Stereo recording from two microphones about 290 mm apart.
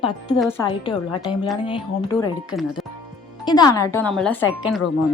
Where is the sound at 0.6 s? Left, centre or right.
Centre.